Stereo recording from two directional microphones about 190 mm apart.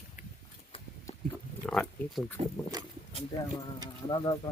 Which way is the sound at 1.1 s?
35° left (ahead or behind).